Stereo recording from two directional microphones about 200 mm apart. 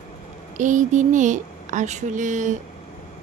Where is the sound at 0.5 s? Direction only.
40° right (ahead or behind).